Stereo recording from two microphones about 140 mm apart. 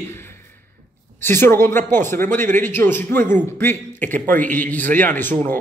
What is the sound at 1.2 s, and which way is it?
A man's voice, 15° left (ahead or behind).